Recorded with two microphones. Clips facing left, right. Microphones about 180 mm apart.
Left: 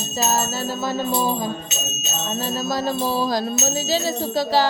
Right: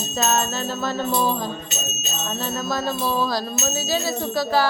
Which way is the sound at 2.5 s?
35° left (ahead or behind).